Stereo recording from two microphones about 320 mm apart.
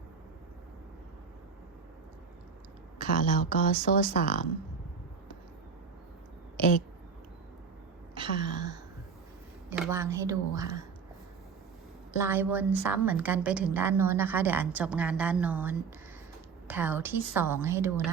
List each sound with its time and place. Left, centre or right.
3.0 s speech: left
8.1 s a sound: centre
9.7 s a woman's voice: centre
12.2 s a woman's voice: centre